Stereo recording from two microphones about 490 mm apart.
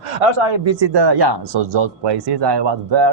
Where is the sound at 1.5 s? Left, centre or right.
Right.